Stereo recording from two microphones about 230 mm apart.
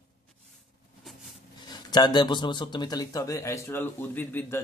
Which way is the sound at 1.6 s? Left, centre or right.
Centre.